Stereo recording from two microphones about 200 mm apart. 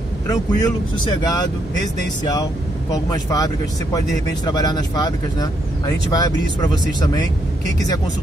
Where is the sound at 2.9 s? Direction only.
20° left (ahead or behind).